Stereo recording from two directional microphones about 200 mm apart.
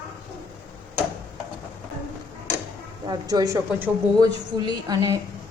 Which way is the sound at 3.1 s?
20° right (ahead or behind).